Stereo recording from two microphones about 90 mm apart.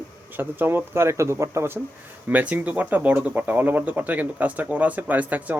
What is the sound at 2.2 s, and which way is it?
Speech, 20° right (ahead or behind).